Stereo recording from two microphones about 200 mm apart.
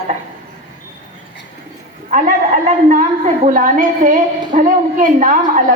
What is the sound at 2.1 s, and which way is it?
A woman's voice, 40° right (ahead or behind).